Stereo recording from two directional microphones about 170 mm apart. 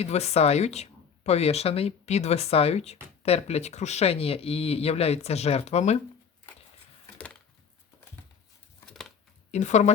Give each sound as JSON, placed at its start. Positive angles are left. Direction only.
{"t": 0.0, "sound": "speech", "side_deg": 40}
{"t": 8.9, "sound": "a sound", "side_deg": 0}
{"t": 9.5, "sound": "speech", "side_deg": 45}